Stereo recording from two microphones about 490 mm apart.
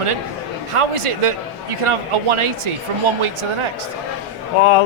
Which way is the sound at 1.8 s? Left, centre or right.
Right.